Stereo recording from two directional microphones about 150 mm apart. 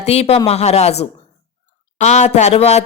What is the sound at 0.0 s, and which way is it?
Speech, 45° left (ahead or behind).